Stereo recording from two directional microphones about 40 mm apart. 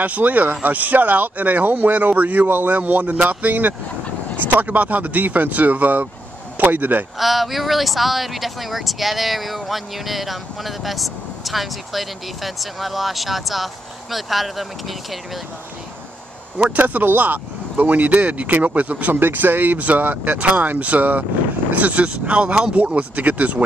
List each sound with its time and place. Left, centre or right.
0.0 s speech: right
7.2 s speech: centre
16.7 s speech: right
19.1 s speech: right